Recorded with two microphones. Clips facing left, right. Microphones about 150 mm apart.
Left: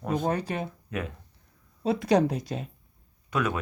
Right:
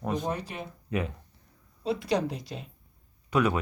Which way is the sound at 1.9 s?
45° left (ahead or behind).